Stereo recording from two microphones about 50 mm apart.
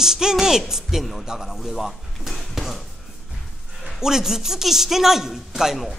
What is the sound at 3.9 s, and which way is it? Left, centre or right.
A man's voice, centre.